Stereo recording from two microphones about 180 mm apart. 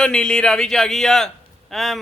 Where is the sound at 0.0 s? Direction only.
5° left (ahead or behind).